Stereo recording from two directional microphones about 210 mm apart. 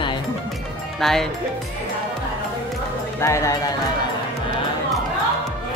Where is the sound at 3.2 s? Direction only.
15° left (ahead or behind).